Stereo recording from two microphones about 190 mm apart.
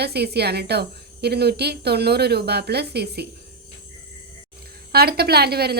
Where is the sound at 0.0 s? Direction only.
60° right (ahead or behind).